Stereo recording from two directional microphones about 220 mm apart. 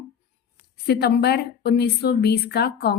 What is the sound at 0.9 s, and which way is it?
A woman's voice, 50° left (ahead or behind).